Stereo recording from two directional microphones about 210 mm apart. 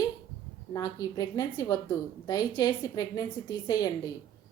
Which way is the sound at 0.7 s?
15° left (ahead or behind).